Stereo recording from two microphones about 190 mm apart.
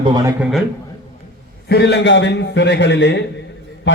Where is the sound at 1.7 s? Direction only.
65° left (ahead or behind).